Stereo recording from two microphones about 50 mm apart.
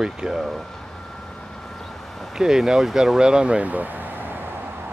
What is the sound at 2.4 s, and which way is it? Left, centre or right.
Speech, centre.